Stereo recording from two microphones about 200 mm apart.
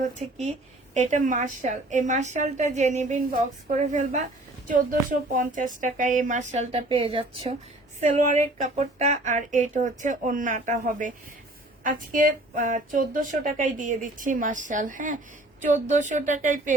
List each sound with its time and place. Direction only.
0.2 s speech: 35° right (ahead or behind)
8.1 s speech: 40° right (ahead or behind)